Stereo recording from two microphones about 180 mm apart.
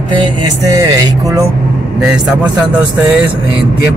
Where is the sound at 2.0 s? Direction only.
5° right (ahead or behind).